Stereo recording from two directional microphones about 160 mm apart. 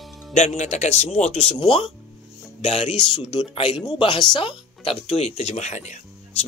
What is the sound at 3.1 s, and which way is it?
Speech, 30° left (ahead or behind).